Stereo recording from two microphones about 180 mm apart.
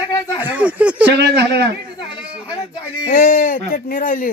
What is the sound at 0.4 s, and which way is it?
Speech, 10° right (ahead or behind).